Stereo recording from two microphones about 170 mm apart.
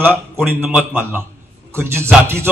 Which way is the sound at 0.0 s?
10° right (ahead or behind).